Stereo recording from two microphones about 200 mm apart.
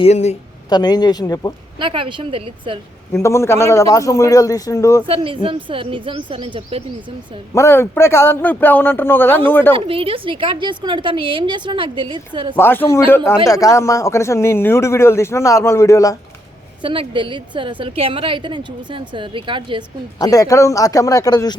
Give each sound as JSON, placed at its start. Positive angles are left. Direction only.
{"t": 0.0, "sound": "speech", "side_deg": 35}
{"t": 0.7, "sound": "speech", "side_deg": 20}
{"t": 1.8, "sound": "a woman's voice", "side_deg": -25}
{"t": 3.1, "sound": "a man's voice", "side_deg": 15}
{"t": 5.0, "sound": "a woman's voice", "side_deg": -25}
{"t": 7.5, "sound": "a man's voice", "side_deg": 15}
{"t": 9.7, "sound": "a woman's voice", "side_deg": -25}
{"t": 12.5, "sound": "a man's voice", "side_deg": 10}
{"t": 16.8, "sound": "a woman's voice", "side_deg": -25}
{"t": 20.1, "sound": "a man's voice", "side_deg": 20}